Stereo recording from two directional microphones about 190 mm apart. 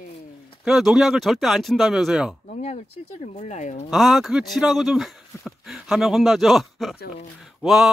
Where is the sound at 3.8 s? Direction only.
Centre (ahead or behind).